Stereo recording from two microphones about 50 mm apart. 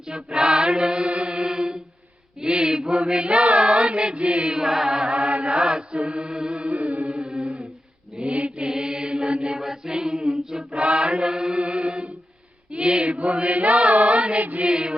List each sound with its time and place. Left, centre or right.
0.1 s mantra: centre
2.4 s chant: centre
4.6 s chant: centre
8.1 s mantra: centre
12.7 s chant: right
14.4 s mantra: right
14.7 s mantra: centre